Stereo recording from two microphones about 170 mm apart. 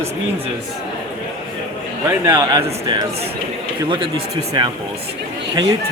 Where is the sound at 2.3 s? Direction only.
20° right (ahead or behind).